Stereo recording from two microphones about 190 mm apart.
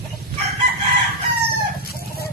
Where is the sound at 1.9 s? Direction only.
55° left (ahead or behind).